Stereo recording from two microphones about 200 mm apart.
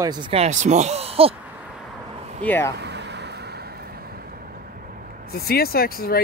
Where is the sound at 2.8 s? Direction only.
55° right (ahead or behind).